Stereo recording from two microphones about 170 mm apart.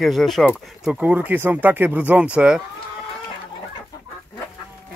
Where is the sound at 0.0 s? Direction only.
Centre (ahead or behind).